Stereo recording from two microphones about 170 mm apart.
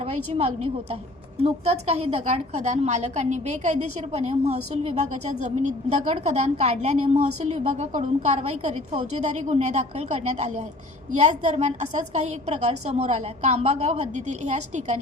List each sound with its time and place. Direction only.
0.0 s a woman's voice: 35° right (ahead or behind)